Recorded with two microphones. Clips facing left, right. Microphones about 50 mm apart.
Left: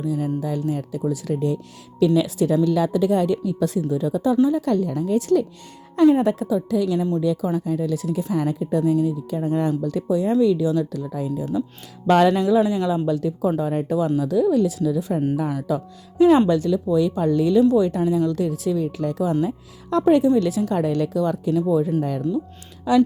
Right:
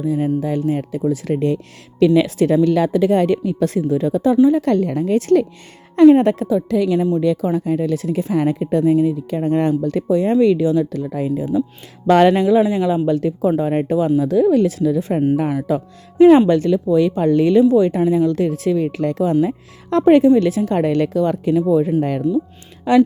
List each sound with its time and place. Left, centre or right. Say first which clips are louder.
0.3 s speech: right 5 dB; right
8.8 s speech: right 5 dB; right
9.0 s speech: right 5 dB; right
17.6 s speech: right 4 dB; right
18.3 s speech: right 5 dB; right